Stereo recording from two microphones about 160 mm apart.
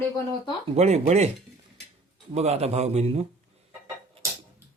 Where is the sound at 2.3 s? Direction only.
40° right (ahead or behind).